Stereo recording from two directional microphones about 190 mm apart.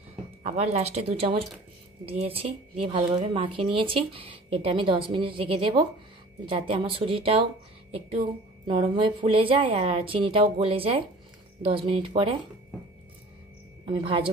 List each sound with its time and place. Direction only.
0.4 s speech: 35° right (ahead or behind)
8.6 s speech: 25° right (ahead or behind)
13.8 s speech: 30° right (ahead or behind)